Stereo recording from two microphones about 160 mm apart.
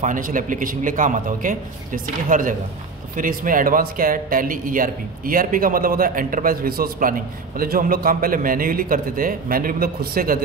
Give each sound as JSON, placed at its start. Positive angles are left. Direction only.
{"t": 0.0, "sound": "a man's voice", "side_deg": -55}